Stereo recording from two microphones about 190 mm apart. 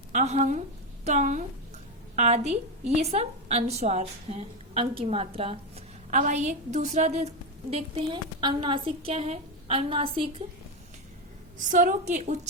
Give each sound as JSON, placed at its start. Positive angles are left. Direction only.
{"t": 0.1, "sound": "a woman's voice", "side_deg": -40}
{"t": 11.5, "sound": "a woman's voice", "side_deg": -45}